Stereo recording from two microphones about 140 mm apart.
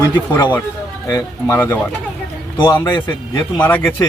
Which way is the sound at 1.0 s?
25° left (ahead or behind).